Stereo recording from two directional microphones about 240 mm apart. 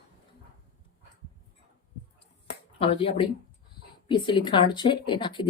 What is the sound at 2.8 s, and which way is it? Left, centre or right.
Speech, left.